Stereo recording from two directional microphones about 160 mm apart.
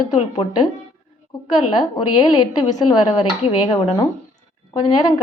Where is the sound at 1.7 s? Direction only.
25° left (ahead or behind).